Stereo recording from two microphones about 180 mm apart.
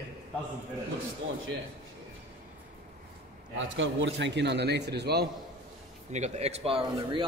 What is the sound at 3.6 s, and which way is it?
A man's voice, 90° right.